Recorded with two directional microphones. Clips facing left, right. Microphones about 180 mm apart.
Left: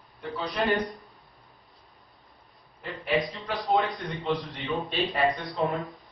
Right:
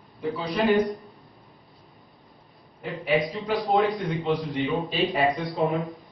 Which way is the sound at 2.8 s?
Centre (ahead or behind).